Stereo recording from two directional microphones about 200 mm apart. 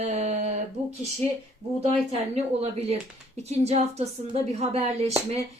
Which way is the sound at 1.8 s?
30° right (ahead or behind).